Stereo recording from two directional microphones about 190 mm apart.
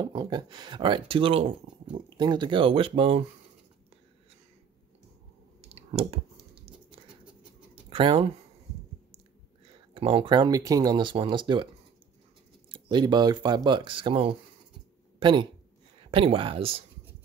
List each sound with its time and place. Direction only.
0.0 s speech: 25° right (ahead or behind)
5.7 s computer keyboard: 30° right (ahead or behind)
7.7 s a sound: 30° right (ahead or behind)
9.9 s speech: 30° right (ahead or behind)
12.7 s speech: 25° right (ahead or behind)